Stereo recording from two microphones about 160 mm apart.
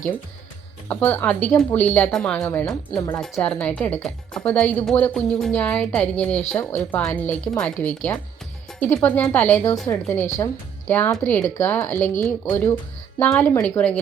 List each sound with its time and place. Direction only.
0.9 s a woman's voice: 10° left (ahead or behind)
2.9 s speech: 20° left (ahead or behind)
3.4 s a woman's voice: 5° left (ahead or behind)